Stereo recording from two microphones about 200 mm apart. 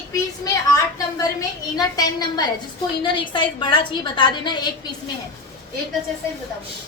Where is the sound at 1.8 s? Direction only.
20° left (ahead or behind).